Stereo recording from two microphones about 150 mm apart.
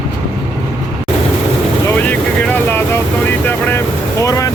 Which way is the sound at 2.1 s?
10° left (ahead or behind).